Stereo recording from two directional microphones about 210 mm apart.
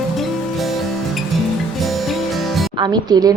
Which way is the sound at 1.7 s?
Centre (ahead or behind).